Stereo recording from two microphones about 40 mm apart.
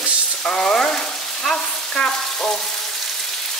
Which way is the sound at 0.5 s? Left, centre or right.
Left.